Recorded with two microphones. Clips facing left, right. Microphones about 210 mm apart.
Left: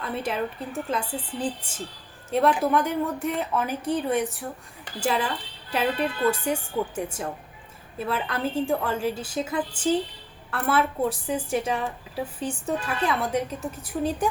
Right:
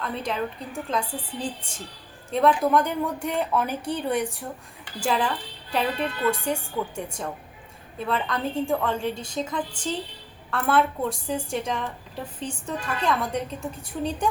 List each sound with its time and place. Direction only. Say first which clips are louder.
0.0 s a woman's voice: even; 5° left (ahead or behind)
2.3 s a woman's voice: right 1 dB; 5° left (ahead or behind)